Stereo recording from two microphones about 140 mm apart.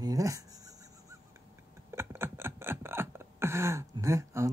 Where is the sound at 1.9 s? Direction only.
15° right (ahead or behind).